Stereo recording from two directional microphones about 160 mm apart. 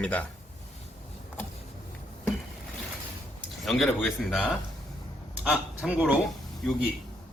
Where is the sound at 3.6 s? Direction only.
Centre (ahead or behind).